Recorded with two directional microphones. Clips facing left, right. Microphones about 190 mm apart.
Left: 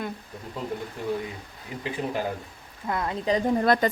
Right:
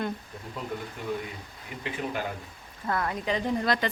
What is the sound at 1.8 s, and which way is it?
Speech, 35° left (ahead or behind).